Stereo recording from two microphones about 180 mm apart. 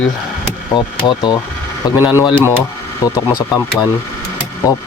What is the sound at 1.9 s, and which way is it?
Speech, 10° right (ahead or behind).